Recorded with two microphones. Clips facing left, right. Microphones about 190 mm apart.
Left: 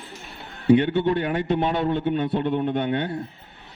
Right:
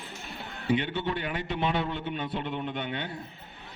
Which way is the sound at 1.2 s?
50° left (ahead or behind).